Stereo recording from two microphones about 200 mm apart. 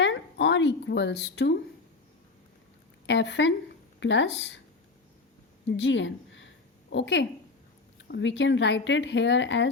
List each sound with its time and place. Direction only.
0.0 s speech: 65° left (ahead or behind)
3.1 s speech: 60° left (ahead or behind)
5.6 s a woman's voice: 60° left (ahead or behind)